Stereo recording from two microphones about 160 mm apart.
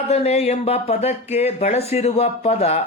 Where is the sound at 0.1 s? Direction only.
40° left (ahead or behind).